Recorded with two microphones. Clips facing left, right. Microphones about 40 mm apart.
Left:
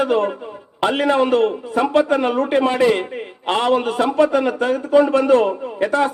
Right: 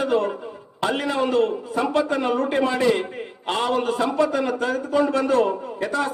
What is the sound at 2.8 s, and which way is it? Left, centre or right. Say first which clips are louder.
A man's voice: left 4 dB; left.